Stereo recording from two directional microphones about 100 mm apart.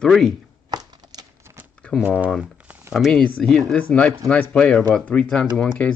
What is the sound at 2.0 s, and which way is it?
Speech, 15° right (ahead or behind).